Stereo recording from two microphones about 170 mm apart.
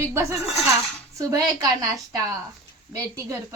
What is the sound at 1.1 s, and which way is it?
Speech, 20° right (ahead or behind).